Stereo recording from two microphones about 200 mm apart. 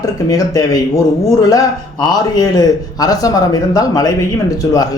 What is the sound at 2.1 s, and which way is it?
A man's voice, 20° left (ahead or behind).